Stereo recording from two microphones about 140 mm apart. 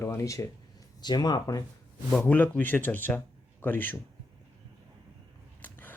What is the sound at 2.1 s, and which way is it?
Speech, 10° left (ahead or behind).